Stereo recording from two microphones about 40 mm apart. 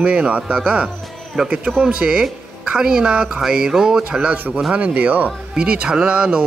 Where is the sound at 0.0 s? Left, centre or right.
Right.